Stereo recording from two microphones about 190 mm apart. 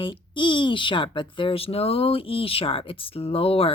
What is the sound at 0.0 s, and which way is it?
Speech, 25° left (ahead or behind).